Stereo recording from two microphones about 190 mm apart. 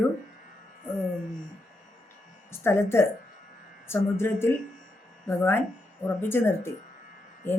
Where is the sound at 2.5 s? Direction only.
15° left (ahead or behind).